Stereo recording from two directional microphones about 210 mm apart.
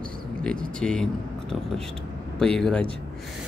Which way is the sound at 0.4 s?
5° left (ahead or behind).